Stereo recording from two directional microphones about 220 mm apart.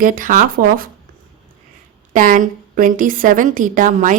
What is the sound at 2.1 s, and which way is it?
Speech, 35° right (ahead or behind).